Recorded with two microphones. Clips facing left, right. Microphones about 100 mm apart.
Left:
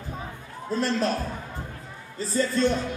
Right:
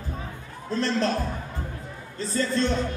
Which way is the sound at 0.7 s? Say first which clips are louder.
Even; 5° left (ahead or behind).